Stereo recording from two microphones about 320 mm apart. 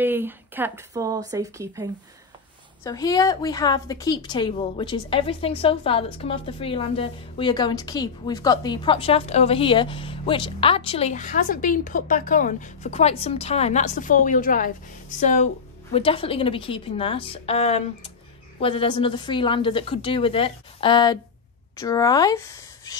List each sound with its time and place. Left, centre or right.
0.0 s speech: centre
2.8 s a woman's voice: centre